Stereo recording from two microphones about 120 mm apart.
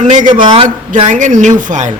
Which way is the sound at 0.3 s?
40° right (ahead or behind).